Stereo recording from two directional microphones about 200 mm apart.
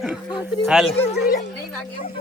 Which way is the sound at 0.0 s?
5° right (ahead or behind).